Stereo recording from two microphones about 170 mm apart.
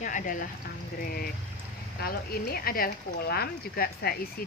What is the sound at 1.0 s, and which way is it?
Speech, 60° left (ahead or behind).